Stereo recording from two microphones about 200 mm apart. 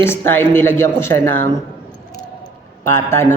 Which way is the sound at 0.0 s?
10° left (ahead or behind).